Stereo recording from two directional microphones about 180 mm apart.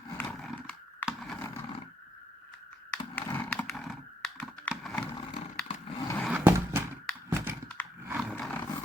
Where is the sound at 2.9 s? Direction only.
10° left (ahead or behind).